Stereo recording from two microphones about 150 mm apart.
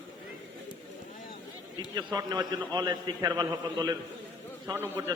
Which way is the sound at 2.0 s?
30° right (ahead or behind).